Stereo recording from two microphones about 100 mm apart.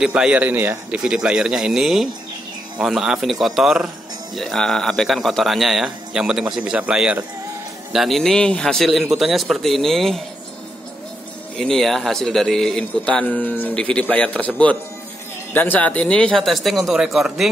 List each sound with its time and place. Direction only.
0.0 s a man's voice: 10° right (ahead or behind)
0.9 s a man's voice: 10° right (ahead or behind)
7.9 s a man's voice: centre (ahead or behind)
11.5 s a man's voice: 5° left (ahead or behind)